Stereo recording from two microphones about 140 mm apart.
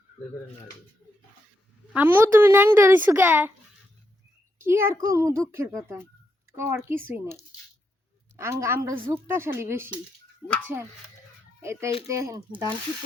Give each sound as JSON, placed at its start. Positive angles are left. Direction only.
{"t": 1.9, "sound": "speech", "side_deg": -10}
{"t": 4.6, "sound": "a child's voice", "side_deg": -15}
{"t": 8.4, "sound": "a child's voice", "side_deg": -20}
{"t": 11.6, "sound": "a child's voice", "side_deg": -20}